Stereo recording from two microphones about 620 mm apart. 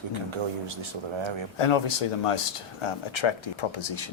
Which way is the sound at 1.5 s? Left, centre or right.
Left.